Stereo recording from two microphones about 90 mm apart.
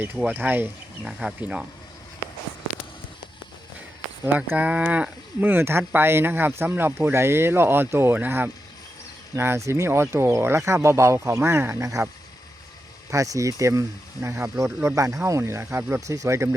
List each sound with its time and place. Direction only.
0.3 s speech: 20° right (ahead or behind)
4.4 s speech: 15° right (ahead or behind); by 12.0 s 35° right (ahead or behind)
13.1 s speech: 40° right (ahead or behind)